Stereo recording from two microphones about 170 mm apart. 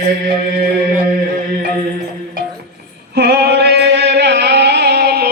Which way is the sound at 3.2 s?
70° right (ahead or behind).